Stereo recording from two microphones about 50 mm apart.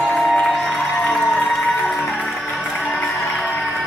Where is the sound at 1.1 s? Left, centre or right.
Centre.